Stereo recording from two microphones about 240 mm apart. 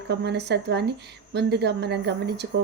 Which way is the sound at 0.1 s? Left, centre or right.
Right.